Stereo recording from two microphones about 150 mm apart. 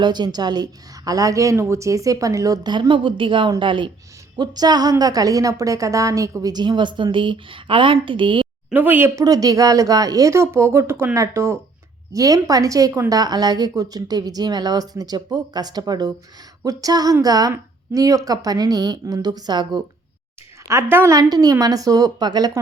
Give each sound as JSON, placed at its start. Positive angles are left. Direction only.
{"t": 0.0, "sound": "a woman's voice", "side_deg": -30}
{"t": 8.7, "sound": "a woman's voice", "side_deg": -10}
{"t": 20.7, "sound": "a woman's voice", "side_deg": -20}